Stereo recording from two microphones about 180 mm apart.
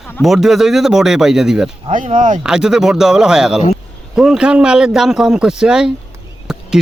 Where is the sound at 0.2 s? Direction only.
Centre (ahead or behind).